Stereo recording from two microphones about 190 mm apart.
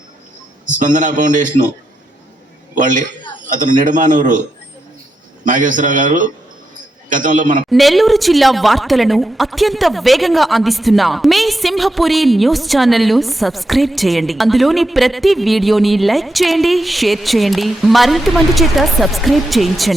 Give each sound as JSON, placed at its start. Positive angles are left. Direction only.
{"t": 0.6, "sound": "a man's voice", "side_deg": -40}
{"t": 2.7, "sound": "a man's voice", "side_deg": -40}
{"t": 5.5, "sound": "a man's voice", "side_deg": -45}
{"t": 7.7, "sound": "a woman's voice", "side_deg": 0}